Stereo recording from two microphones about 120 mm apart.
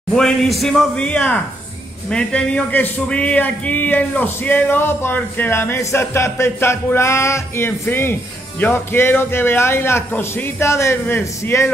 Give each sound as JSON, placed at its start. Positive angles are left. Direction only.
{"t": 0.1, "sound": "a man's voice", "side_deg": 5}